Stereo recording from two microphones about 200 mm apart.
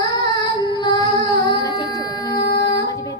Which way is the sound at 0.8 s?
20° left (ahead or behind).